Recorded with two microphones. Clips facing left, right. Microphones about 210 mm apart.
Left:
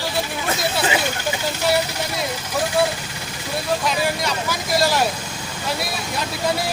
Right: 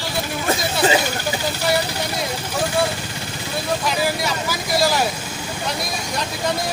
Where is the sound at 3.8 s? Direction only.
Centre (ahead or behind).